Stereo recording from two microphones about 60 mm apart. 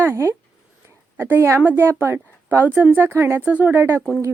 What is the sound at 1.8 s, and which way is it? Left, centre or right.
A woman's voice, right.